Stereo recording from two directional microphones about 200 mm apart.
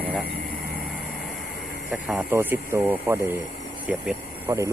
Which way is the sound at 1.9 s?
5° right (ahead or behind).